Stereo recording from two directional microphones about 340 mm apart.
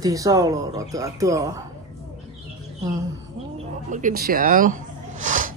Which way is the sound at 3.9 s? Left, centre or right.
Right.